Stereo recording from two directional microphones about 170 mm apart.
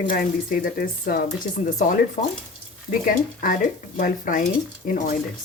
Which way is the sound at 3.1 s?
55° left (ahead or behind).